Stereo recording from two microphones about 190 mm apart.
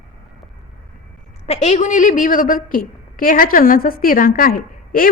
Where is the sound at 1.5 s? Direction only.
35° left (ahead or behind).